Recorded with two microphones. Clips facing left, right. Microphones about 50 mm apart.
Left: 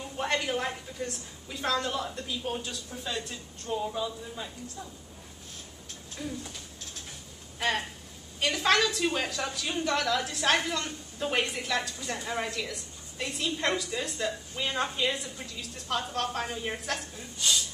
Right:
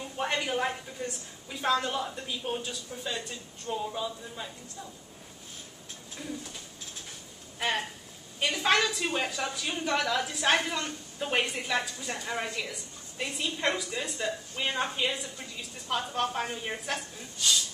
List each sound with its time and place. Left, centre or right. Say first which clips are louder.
0.2 s a woman's voice: even; centre
6.2 s bird: left 2 dB; centre
7.5 s a woman's voice: left 1 dB; centre